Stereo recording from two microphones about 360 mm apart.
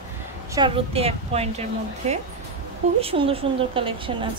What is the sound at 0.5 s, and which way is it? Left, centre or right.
Speech, centre.